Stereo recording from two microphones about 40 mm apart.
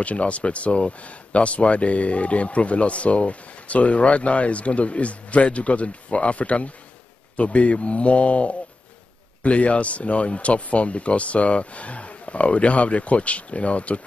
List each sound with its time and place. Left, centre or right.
0.0 s speech: left